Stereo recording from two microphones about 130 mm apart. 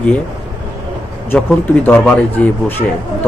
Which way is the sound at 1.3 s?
15° left (ahead or behind).